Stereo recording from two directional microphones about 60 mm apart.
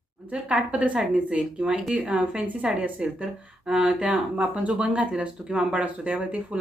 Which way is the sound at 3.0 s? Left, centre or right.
Centre.